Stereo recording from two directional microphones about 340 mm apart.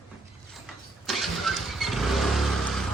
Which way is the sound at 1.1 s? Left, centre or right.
Centre.